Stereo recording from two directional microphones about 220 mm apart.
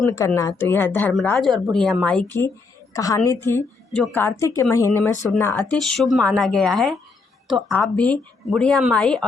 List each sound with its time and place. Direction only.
0.0 s a woman's voice: 15° left (ahead or behind)